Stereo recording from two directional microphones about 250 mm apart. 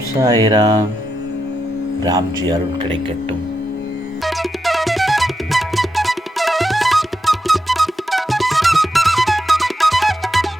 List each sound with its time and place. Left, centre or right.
0.2 s speech: centre
2.0 s speech: centre
4.3 s music: centre